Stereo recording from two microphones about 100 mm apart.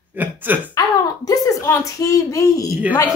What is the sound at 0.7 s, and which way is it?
A woman's voice, 40° left (ahead or behind).